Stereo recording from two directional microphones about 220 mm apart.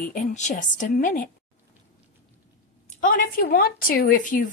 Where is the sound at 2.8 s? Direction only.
35° left (ahead or behind).